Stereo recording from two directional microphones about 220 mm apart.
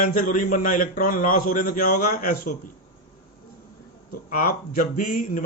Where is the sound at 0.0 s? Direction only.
35° left (ahead or behind).